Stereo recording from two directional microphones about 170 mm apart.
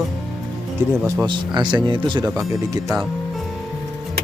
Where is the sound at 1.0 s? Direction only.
20° right (ahead or behind).